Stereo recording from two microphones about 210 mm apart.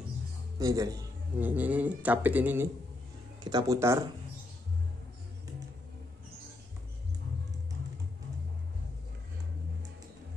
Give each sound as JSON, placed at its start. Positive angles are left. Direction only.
{"t": 0.6, "sound": "speech", "side_deg": -15}